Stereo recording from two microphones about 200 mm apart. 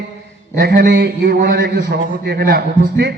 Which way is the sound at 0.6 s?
55° right (ahead or behind).